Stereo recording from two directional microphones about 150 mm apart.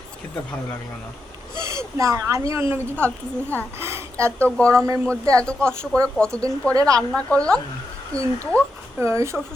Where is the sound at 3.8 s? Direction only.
15° right (ahead or behind).